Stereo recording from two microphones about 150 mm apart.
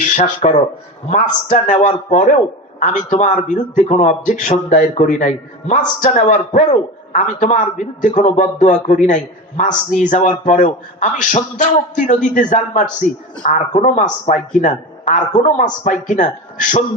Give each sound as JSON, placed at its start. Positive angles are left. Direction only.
{"t": 0.0, "sound": "speech", "side_deg": 55}